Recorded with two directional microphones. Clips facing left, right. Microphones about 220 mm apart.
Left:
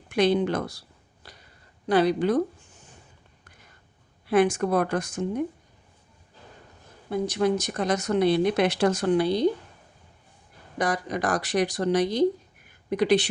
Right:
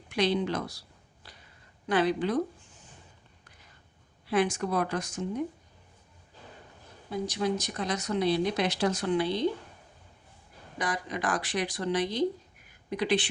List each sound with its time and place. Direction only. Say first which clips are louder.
0.1 s speech: left 5 dB; 50° left (ahead or behind)
1.9 s a woman's voice: left 5 dB; 40° left (ahead or behind)
4.3 s speech: left 6 dB; 55° left (ahead or behind)
7.1 s speech: left 6 dB; 55° left (ahead or behind); by 9.5 s 40° left (ahead or behind)
10.8 s speech: left 6 dB; 45° left (ahead or behind)